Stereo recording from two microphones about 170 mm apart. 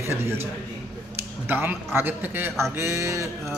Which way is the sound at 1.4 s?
15° right (ahead or behind).